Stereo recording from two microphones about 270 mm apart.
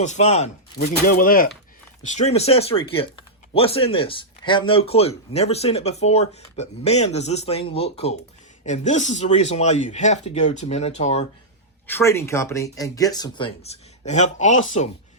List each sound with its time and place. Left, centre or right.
0.0 s speech: left
11.9 s speech: centre; by 14.8 s left